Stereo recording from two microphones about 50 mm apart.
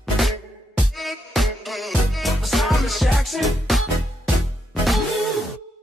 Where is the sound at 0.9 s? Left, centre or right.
Centre.